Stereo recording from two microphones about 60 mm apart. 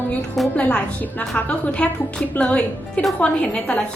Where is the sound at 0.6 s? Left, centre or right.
Left.